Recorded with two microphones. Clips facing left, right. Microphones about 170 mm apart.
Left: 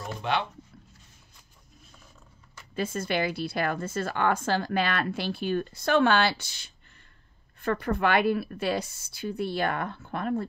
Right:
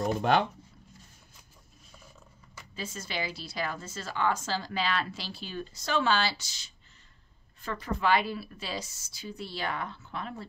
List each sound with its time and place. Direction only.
0.0 s speech: 45° right (ahead or behind)
2.7 s speech: 55° left (ahead or behind)